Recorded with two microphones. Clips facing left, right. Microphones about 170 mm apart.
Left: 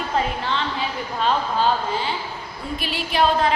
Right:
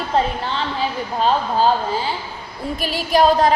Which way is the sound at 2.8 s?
40° right (ahead or behind).